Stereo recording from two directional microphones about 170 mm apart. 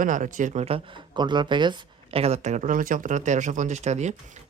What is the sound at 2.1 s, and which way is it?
Speech, 40° right (ahead or behind).